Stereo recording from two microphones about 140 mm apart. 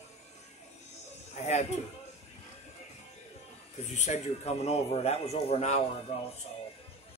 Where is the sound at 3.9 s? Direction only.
55° left (ahead or behind).